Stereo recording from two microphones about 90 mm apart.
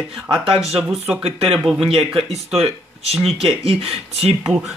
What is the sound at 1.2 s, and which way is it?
Speech, 90° right.